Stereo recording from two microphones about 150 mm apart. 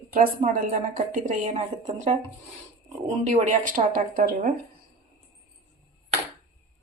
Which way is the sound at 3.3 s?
55° right (ahead or behind).